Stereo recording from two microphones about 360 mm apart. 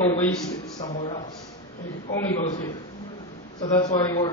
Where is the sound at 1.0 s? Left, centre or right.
Centre.